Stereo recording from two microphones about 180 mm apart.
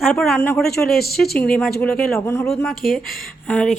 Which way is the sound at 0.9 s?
60° left (ahead or behind).